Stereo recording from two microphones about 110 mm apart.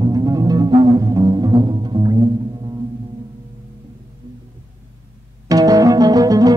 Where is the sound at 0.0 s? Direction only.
35° right (ahead or behind).